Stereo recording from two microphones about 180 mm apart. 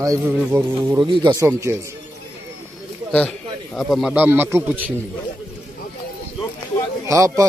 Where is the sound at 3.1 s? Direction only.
5° left (ahead or behind).